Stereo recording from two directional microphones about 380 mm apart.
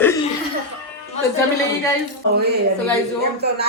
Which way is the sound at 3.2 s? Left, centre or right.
Right.